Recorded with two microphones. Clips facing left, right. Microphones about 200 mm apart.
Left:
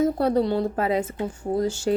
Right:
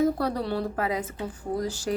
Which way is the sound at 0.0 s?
25° left (ahead or behind).